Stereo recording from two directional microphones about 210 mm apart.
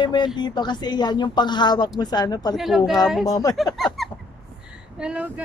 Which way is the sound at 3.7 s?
Centre (ahead or behind).